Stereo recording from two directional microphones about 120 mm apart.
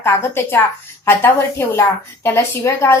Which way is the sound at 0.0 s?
20° left (ahead or behind).